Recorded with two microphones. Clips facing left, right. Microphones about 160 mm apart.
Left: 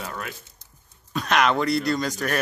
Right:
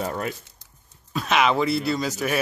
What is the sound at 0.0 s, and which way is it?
Speech, 35° right (ahead or behind).